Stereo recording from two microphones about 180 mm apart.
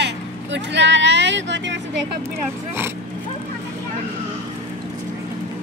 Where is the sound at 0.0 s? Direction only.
75° right (ahead or behind).